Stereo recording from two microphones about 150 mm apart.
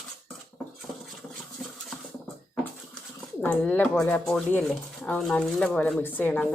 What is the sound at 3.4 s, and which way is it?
Speech, 10° left (ahead or behind).